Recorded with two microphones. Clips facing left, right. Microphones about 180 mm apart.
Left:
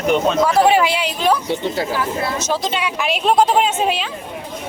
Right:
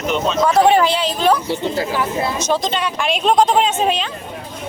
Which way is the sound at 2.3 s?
5° left (ahead or behind).